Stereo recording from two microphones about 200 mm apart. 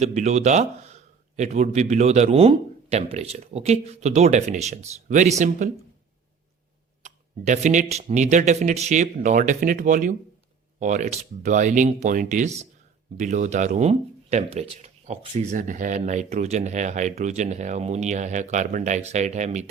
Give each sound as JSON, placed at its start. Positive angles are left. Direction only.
{"t": 0.0, "sound": "speech", "side_deg": -35}
{"t": 7.0, "sound": "speech", "side_deg": -35}